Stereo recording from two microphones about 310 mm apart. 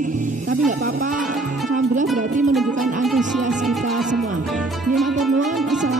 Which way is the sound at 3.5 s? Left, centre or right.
Centre.